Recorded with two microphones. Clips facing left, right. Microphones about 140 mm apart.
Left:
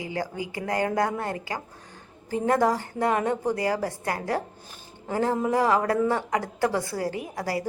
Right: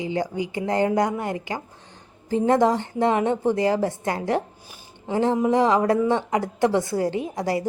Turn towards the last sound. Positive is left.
turn(degrees=-25)  # may be behind; listen again after turning